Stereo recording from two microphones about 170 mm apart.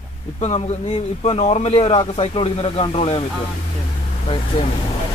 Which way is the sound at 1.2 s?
35° left (ahead or behind).